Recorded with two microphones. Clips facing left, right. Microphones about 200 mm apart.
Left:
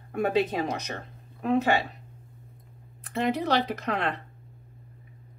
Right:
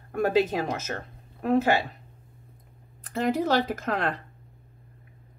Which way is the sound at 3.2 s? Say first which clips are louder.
Right 2 dB; 45° right (ahead or behind).